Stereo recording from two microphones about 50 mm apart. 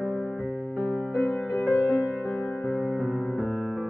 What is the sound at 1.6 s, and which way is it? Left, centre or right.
Music, left.